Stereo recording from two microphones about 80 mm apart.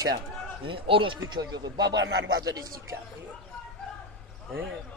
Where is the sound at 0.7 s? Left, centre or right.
Right.